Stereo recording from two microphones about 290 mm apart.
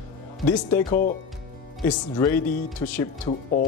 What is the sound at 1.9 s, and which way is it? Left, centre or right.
Speech, centre.